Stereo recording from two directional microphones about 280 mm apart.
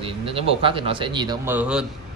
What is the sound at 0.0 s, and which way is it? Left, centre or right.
A man's voice, centre.